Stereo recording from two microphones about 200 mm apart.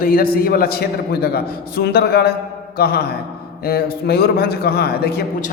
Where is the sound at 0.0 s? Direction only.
45° left (ahead or behind).